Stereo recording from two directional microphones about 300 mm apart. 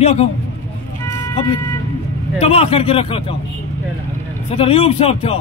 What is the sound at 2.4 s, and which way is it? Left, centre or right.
Speech, centre.